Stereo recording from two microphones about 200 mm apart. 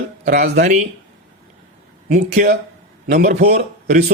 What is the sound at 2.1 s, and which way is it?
Speech, 35° right (ahead or behind).